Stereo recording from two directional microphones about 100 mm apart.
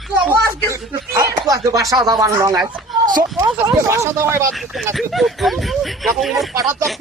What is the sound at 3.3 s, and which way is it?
Speech, 25° right (ahead or behind).